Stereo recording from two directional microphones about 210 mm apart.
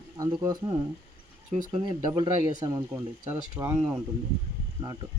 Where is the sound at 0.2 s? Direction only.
20° right (ahead or behind).